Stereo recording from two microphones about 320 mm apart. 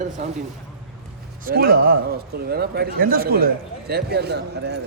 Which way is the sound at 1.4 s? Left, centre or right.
Right.